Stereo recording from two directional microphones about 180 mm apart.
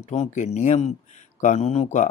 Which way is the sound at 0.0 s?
40° left (ahead or behind).